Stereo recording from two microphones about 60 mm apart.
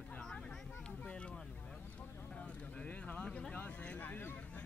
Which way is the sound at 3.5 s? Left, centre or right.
Left.